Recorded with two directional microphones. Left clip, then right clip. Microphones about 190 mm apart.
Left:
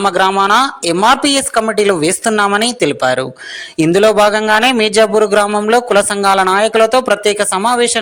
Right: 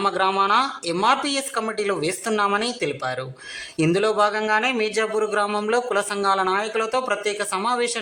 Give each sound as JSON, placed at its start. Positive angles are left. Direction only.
{"t": 0.0, "sound": "a woman's voice", "side_deg": 35}